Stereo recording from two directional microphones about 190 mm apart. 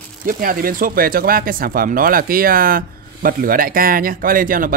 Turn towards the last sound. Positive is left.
turn(degrees=-45)  # may be behind; listen again after turning